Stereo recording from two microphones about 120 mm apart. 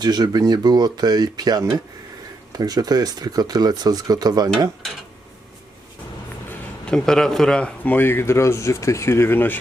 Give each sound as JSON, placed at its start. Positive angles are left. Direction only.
{"t": 0.0, "sound": "speech", "side_deg": -35}
{"t": 6.5, "sound": "a man's voice", "side_deg": 5}